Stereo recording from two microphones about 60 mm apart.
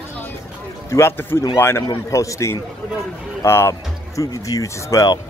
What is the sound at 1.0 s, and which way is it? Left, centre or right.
Speech, left.